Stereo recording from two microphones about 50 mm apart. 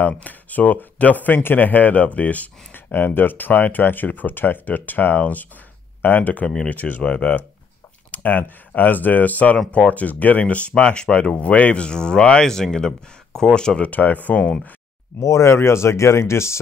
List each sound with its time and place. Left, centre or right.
0.2 s speech: left
8.1 s speech: left; by 13.8 s centre
13.8 s speech: left
15.2 s speech: left